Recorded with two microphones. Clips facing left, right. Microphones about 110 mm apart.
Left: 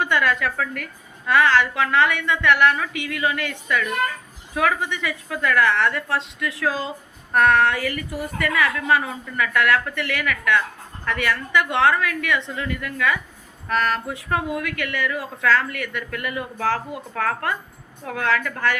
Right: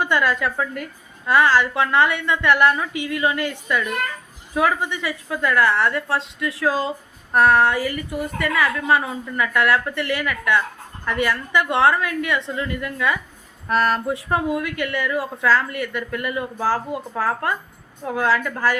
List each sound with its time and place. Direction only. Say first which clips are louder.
0.0 s a woman's voice: right 1 dB; 30° right (ahead or behind)